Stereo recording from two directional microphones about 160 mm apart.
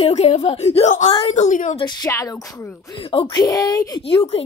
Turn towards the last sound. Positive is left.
turn(degrees=35)  # may be behind; listen again after turning